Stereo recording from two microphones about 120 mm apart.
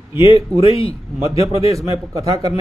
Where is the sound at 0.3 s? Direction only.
55° left (ahead or behind).